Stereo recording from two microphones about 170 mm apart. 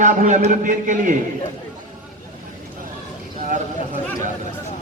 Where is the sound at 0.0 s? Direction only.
50° right (ahead or behind).